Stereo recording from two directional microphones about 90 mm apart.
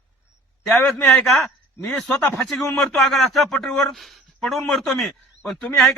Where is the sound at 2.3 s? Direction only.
5° left (ahead or behind).